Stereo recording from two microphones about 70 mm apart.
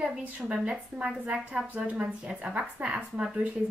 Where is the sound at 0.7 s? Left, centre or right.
Centre.